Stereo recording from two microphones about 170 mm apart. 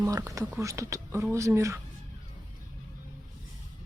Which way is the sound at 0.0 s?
15° right (ahead or behind).